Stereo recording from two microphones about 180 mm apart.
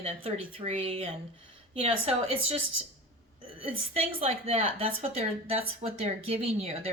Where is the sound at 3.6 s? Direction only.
30° right (ahead or behind).